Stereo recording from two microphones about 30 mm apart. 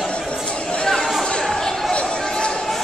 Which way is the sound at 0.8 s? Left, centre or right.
Centre.